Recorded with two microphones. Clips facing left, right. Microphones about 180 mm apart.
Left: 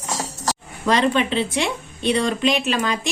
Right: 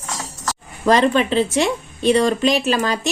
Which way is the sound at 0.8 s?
40° right (ahead or behind).